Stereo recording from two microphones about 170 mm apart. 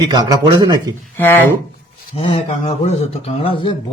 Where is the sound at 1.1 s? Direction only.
10° left (ahead or behind).